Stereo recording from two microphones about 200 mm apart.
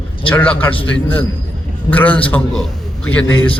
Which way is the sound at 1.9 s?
10° left (ahead or behind).